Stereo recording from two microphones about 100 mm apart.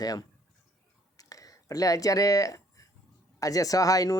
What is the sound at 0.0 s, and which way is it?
Speech, 40° left (ahead or behind).